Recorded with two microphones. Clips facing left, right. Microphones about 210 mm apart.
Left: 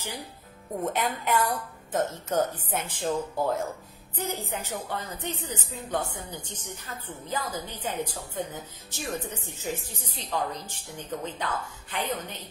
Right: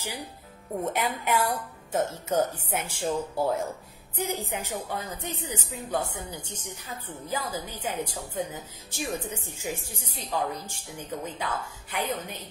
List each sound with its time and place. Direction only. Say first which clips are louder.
0.8 s a woman's voice: left 1 dB; 10° right (ahead or behind)